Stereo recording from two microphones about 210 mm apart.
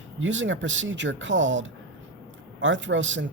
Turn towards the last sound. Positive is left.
turn(degrees=-60)  # may be behind; listen again after turning